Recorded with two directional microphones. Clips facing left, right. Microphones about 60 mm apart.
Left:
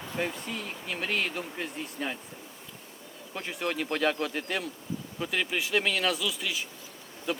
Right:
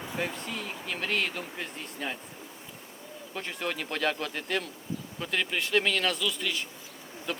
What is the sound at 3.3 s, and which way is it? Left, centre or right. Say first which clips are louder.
Speech: left 2 dB; centre.